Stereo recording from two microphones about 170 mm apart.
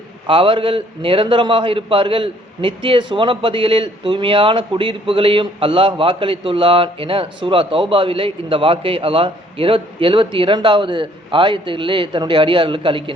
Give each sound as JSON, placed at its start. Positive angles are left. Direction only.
{"t": 0.3, "sound": "a man's voice", "side_deg": -30}